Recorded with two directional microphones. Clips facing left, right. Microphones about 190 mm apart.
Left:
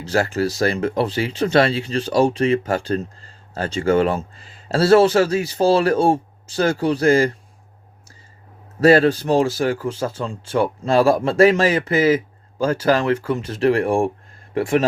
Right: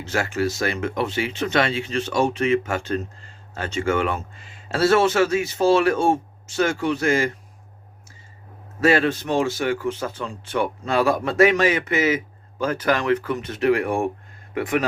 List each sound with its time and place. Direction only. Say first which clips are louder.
0.0 s speech: left 4 dB; 35° left (ahead or behind)
8.8 s speech: left 5 dB; 35° left (ahead or behind)